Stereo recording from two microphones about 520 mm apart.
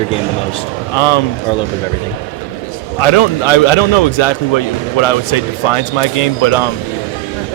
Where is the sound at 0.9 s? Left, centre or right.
Left.